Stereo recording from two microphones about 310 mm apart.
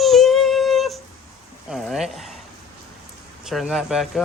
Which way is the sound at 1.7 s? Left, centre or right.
Centre.